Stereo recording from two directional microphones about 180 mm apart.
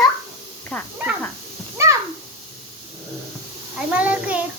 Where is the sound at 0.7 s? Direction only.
5° left (ahead or behind).